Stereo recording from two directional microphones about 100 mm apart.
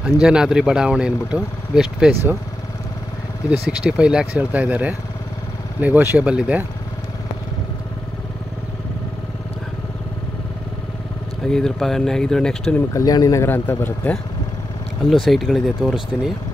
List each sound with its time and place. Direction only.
0.0 s speech: 10° right (ahead or behind)
3.4 s speech: 10° right (ahead or behind)
11.4 s speech: 5° left (ahead or behind)
12.9 s speech: 35° left (ahead or behind)
13.5 s a man's voice: 20° left (ahead or behind)
15.0 s speech: centre (ahead or behind)